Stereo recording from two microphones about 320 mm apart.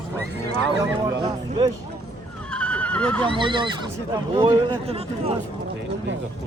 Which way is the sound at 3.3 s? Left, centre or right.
Centre.